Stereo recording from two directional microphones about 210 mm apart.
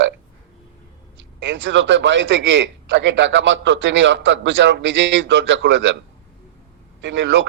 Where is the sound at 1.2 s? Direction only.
60° right (ahead or behind).